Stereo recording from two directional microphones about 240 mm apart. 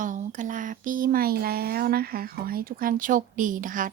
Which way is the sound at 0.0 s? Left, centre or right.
Right.